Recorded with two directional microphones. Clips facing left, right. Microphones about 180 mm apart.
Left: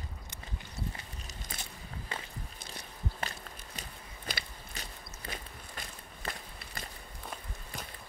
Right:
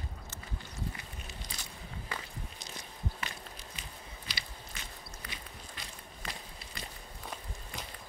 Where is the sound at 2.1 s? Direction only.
25° left (ahead or behind).